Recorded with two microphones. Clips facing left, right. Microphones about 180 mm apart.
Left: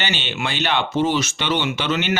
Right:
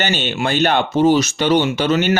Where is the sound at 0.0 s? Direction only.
45° right (ahead or behind).